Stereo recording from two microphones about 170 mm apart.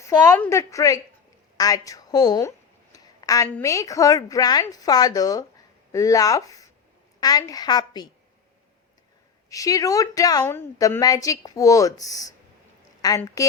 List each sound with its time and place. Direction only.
0.0 s a woman's voice: 15° left (ahead or behind)
2.9 s a sound: 20° left (ahead or behind)
3.5 s a woman's voice: 15° left (ahead or behind)
9.5 s a woman's voice: 20° left (ahead or behind)